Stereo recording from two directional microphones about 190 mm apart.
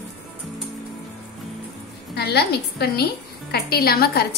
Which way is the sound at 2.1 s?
60° left (ahead or behind).